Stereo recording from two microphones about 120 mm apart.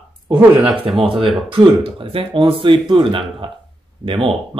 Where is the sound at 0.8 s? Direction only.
45° right (ahead or behind).